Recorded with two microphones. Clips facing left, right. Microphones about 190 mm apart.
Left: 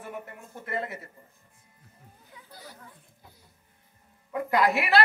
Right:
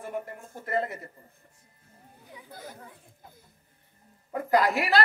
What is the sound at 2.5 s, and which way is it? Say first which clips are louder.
Speech: right 4 dB; 50° right (ahead or behind).